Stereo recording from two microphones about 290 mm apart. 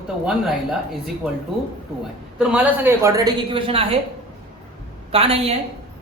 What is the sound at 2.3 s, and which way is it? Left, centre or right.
A woman's voice, centre.